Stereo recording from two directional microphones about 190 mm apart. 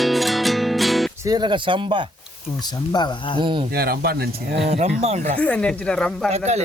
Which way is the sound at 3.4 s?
25° right (ahead or behind).